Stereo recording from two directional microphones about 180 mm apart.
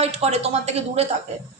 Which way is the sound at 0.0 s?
35° right (ahead or behind).